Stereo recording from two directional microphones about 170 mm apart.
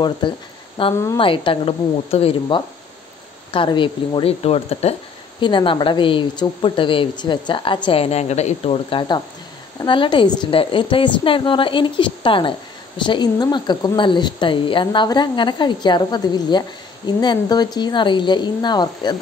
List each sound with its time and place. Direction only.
0.2 s a woman's voice: 25° left (ahead or behind)